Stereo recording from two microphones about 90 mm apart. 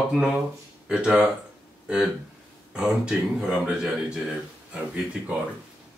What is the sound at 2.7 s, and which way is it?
Speech, 10° right (ahead or behind).